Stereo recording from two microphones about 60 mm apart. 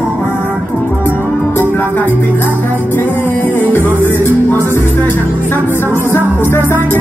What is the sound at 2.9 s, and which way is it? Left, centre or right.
Music, left.